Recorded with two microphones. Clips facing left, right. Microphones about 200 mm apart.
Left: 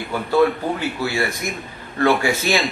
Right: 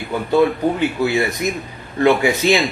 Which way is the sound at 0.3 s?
15° right (ahead or behind).